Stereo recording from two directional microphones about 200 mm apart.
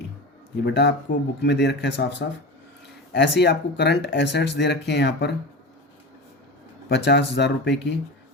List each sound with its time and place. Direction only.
0.5 s speech: 55° left (ahead or behind)
6.8 s speech: 60° left (ahead or behind)